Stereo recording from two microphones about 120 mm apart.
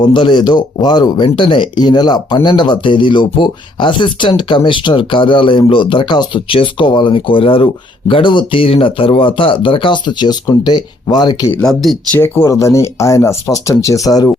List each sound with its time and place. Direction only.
0.0 s speech: 40° left (ahead or behind)
11.6 s speech: centre (ahead or behind)
12.1 s speech: 20° left (ahead or behind)